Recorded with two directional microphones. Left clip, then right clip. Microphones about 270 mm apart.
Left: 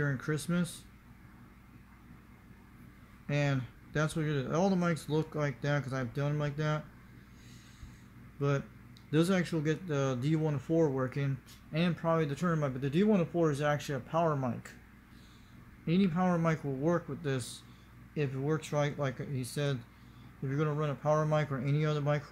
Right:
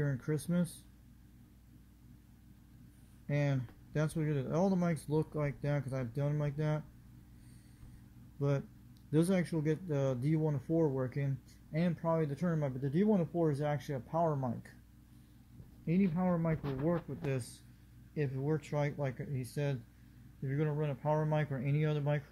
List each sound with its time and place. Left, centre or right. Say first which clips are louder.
0.0 s speech: left 3 dB; centre
3.3 s speech: left 3 dB; centre
8.4 s speech: left 3 dB; centre
15.8 s speech: left 4 dB; centre